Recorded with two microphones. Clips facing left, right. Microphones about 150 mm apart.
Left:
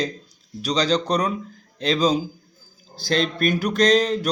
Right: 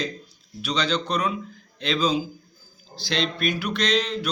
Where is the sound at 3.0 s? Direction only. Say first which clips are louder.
Left 4 dB; 45° left (ahead or behind).